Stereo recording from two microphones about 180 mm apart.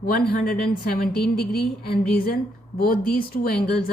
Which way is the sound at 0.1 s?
55° left (ahead or behind).